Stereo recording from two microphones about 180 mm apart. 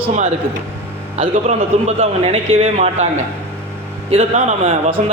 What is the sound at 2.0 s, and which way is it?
A man's voice, 35° right (ahead or behind).